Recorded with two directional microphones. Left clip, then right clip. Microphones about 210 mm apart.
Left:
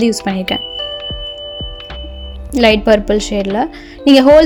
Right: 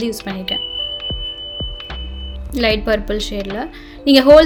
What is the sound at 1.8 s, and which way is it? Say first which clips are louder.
Music: left 1 dB; centre (ahead or behind).